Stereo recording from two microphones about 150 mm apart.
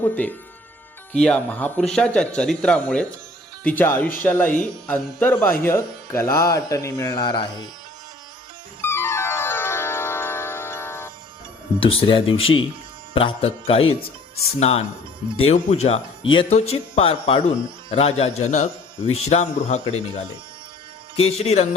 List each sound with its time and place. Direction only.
0.0 s speech: 10° left (ahead or behind); by 7.7 s 30° left (ahead or behind)
8.9 s music: 15° left (ahead or behind)
11.8 s speech: 35° left (ahead or behind)